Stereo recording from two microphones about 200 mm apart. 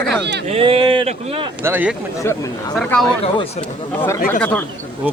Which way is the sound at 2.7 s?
5° left (ahead or behind).